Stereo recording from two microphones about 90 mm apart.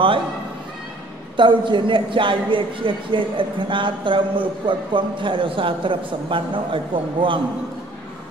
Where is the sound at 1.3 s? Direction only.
65° right (ahead or behind).